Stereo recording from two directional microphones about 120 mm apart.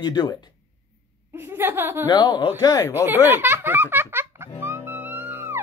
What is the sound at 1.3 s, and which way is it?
Speech, 20° right (ahead or behind).